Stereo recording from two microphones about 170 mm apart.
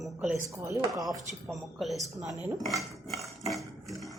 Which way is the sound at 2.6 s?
Centre (ahead or behind).